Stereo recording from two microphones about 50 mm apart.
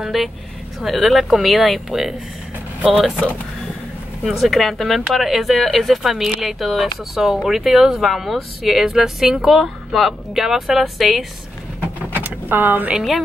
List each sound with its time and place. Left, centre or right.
0.0 s speech: centre
4.2 s speech: centre
12.1 s vehicle: right